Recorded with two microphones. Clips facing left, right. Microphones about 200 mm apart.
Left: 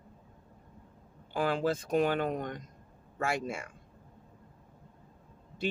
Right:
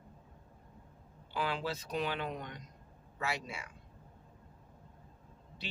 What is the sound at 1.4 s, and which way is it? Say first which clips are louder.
Speech: left 7 dB; 50° left (ahead or behind).